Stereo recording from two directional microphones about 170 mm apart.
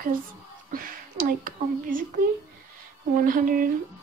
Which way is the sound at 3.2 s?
55° right (ahead or behind).